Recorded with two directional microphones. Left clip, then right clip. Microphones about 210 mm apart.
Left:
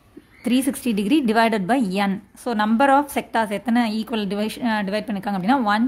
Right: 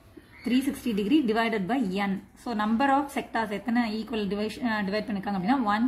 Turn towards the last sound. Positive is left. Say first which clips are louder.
# left 6 dB
turn(degrees=40)  # may be behind; listen again after turning